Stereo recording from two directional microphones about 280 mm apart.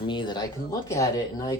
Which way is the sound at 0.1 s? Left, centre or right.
Centre.